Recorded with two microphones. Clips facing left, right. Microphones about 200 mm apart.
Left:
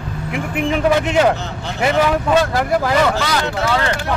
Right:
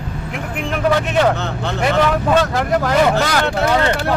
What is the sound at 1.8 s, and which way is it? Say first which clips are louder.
A man's voice: left 1 dB; 5° left (ahead or behind).